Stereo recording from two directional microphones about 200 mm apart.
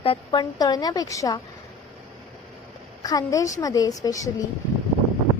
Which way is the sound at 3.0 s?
15° left (ahead or behind).